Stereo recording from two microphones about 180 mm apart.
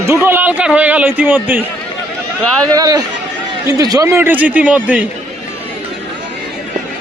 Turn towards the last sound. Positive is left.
turn(degrees=-10)  # may be behind; listen again after turning